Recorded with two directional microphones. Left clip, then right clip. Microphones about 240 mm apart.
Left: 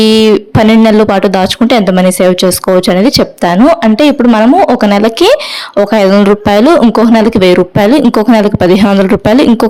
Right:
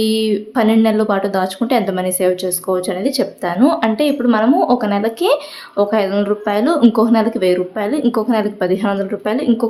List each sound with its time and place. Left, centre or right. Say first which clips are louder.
0.0 s speech: left 11 dB; left